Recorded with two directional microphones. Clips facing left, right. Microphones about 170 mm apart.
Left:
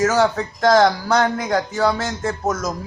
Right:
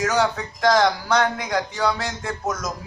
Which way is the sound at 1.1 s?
45° left (ahead or behind).